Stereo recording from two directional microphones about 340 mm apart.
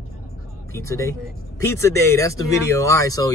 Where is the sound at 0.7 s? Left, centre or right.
Centre.